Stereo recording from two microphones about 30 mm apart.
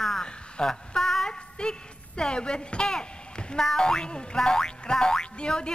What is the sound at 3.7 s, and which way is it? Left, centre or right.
Speech, left.